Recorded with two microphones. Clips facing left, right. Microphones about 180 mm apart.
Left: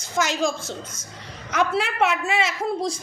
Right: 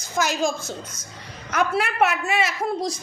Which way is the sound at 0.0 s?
25° left (ahead or behind).